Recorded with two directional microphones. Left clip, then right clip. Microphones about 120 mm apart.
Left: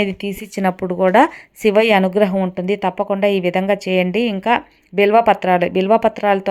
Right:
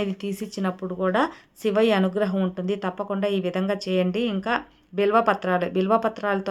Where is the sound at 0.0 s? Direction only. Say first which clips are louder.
Left 8 dB; 40° left (ahead or behind).